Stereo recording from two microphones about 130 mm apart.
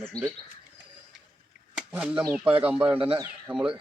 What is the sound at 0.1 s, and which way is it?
Speech, 30° right (ahead or behind).